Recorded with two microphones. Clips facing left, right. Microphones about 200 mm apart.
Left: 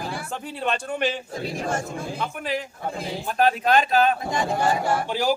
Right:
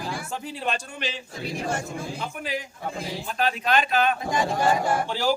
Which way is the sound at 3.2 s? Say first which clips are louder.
Left 6 dB; 45° left (ahead or behind).